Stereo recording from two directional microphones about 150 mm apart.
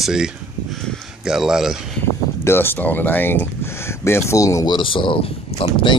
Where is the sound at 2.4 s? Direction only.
15° left (ahead or behind).